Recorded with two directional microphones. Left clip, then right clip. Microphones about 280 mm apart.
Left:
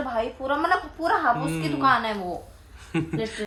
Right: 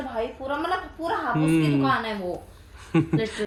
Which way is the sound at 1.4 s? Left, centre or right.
Right.